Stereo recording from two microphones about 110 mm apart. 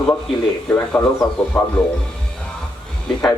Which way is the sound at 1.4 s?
5° left (ahead or behind).